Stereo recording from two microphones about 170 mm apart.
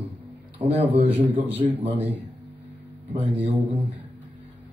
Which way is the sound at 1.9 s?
10° right (ahead or behind).